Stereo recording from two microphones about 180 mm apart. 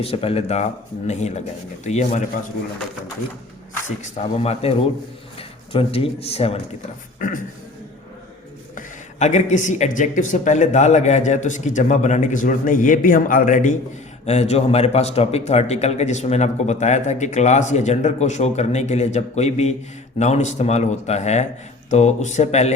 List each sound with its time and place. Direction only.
0.0 s a man's voice: 30° left (ahead or behind)
3.8 s a man's voice: 35° left (ahead or behind)
7.2 s speech: 45° left (ahead or behind)
8.7 s a man's voice: 40° left (ahead or behind)